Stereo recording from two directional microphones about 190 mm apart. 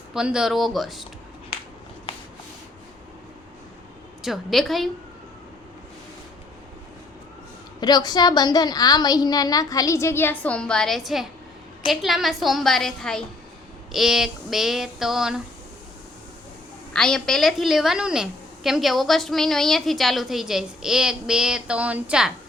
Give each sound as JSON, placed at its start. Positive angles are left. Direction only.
{"t": 0.1, "sound": "a woman's voice", "side_deg": -5}
{"t": 4.2, "sound": "a woman's voice", "side_deg": 0}
{"t": 7.8, "sound": "a woman's voice", "side_deg": 20}
{"t": 16.9, "sound": "a woman's voice", "side_deg": 5}